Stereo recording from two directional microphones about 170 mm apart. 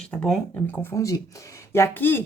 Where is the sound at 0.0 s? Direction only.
5° left (ahead or behind).